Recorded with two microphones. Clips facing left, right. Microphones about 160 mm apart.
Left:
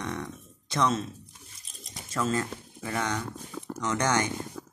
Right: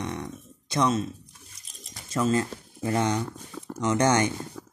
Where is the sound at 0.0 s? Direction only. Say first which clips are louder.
Right 2 dB; 20° right (ahead or behind).